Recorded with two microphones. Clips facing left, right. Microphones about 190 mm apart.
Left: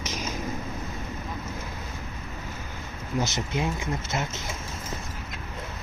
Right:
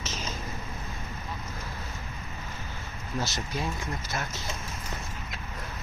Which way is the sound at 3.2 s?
20° left (ahead or behind).